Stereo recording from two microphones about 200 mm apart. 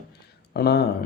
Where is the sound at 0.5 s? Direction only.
55° left (ahead or behind).